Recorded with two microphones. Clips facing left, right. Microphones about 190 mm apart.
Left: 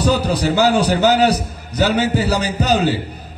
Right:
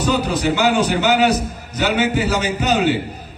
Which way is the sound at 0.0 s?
40° left (ahead or behind).